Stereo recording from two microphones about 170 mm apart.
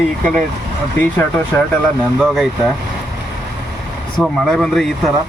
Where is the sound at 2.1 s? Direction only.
Centre (ahead or behind).